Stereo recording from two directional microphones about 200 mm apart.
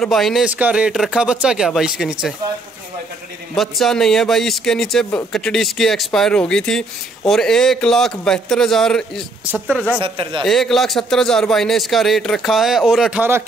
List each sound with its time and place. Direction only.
0.0 s a man's voice: centre (ahead or behind)
3.5 s a man's voice: centre (ahead or behind)
9.9 s speech: 25° right (ahead or behind)
10.4 s a man's voice: centre (ahead or behind)